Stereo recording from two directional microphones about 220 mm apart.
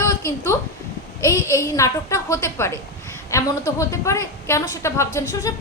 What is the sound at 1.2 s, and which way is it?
A woman's voice, 15° left (ahead or behind).